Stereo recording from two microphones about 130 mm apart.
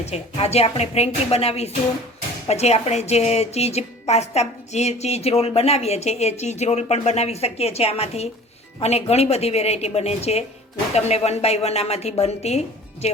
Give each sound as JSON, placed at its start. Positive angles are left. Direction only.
{"t": 0.0, "sound": "a woman's voice", "side_deg": 55}